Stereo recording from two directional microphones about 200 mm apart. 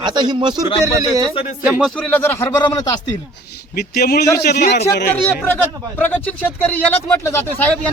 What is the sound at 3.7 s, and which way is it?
A man's voice, 50° left (ahead or behind).